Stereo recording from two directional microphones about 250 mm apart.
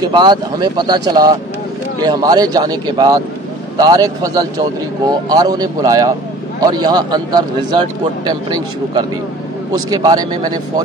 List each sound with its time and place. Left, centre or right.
0.0 s speech: centre